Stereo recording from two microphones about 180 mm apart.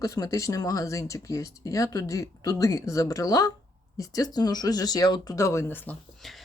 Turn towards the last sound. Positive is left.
turn(degrees=0)  # may be behind; listen again after turning